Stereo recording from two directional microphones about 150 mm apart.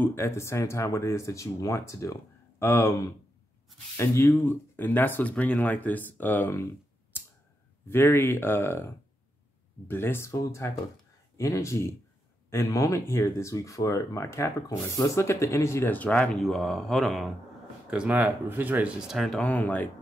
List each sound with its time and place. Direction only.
0.0 s speech: 15° left (ahead or behind)
7.8 s a man's voice: 15° left (ahead or behind)